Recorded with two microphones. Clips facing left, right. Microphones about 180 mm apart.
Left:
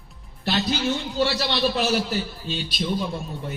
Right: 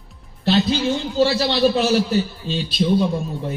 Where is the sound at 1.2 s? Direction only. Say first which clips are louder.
Right 7 dB; 25° right (ahead or behind).